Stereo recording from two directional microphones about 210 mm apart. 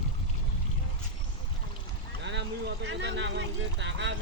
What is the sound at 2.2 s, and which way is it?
Speech, 55° right (ahead or behind).